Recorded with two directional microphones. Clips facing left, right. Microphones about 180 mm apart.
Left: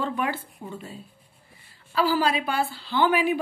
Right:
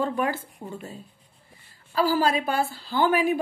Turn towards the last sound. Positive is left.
turn(degrees=-45)  # may be behind; listen again after turning